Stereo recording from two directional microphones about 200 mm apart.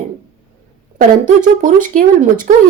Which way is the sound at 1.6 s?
40° right (ahead or behind).